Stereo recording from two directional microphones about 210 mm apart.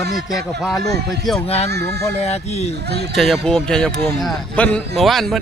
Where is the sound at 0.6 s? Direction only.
Centre (ahead or behind).